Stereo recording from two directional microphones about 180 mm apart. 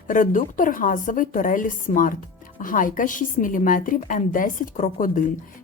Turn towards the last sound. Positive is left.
turn(degrees=50)  # may be behind; listen again after turning